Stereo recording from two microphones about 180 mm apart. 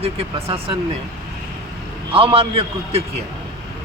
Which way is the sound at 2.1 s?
30° right (ahead or behind).